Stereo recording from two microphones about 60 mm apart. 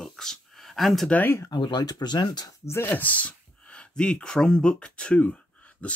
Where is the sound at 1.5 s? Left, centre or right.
Left.